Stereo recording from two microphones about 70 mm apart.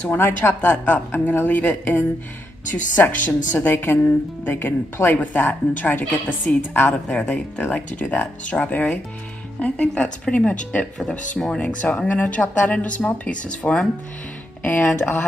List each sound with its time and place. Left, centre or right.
0.1 s a woman's voice: left
7.1 s a woman's voice: centre
14.6 s a woman's voice: left